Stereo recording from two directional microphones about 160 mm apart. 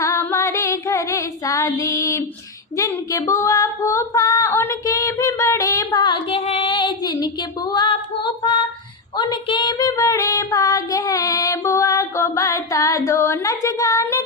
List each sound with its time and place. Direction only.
0.0 s child singing: 20° left (ahead or behind)
2.7 s female singing: 20° left (ahead or behind)